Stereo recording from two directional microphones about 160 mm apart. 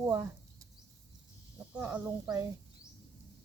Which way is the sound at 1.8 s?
10° right (ahead or behind).